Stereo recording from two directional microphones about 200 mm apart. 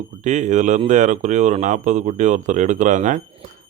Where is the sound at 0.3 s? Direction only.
35° right (ahead or behind).